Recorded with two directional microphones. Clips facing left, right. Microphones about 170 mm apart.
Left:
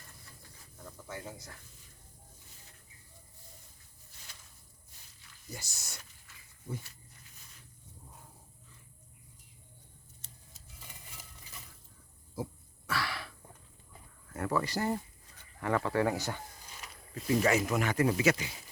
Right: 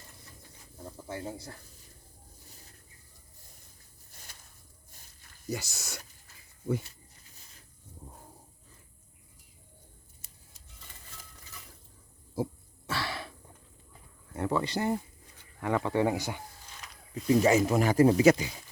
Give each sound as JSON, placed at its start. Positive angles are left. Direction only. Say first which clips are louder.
{"t": 0.9, "sound": "snake", "louder": "right 5 dB", "side_deg": -30}
{"t": 4.9, "sound": "walk", "louder": "right 2 dB", "side_deg": -45}
{"t": 5.5, "sound": "speech", "louder": "right 11 dB", "side_deg": -80}
{"t": 12.4, "sound": "pig", "louder": "right 6 dB", "side_deg": -30}
{"t": 12.9, "sound": "throat clearing", "louder": "right 1 dB", "side_deg": -25}
{"t": 14.3, "sound": "speech", "louder": "right 2 dB", "side_deg": -25}
{"t": 16.8, "sound": "a sound", "louder": "right 6 dB", "side_deg": 0}
{"t": 17.4, "sound": "speech", "louder": "right 4 dB", "side_deg": -30}